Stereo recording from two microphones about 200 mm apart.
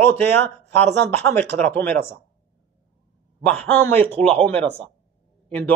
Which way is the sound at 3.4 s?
5° left (ahead or behind).